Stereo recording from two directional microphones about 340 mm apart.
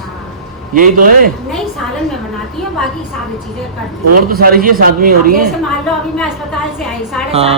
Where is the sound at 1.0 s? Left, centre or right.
Right.